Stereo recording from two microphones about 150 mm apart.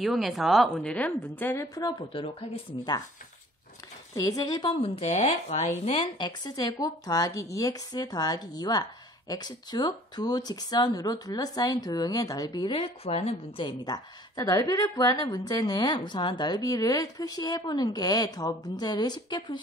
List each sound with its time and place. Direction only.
0.0 s a woman's voice: centre (ahead or behind); by 2.9 s 35° left (ahead or behind)
4.1 s a woman's voice: 25° left (ahead or behind)
4.7 s speech: 40° left (ahead or behind)
5.9 s a woman's voice: 30° left (ahead or behind)
13.7 s a woman's voice: 30° left (ahead or behind)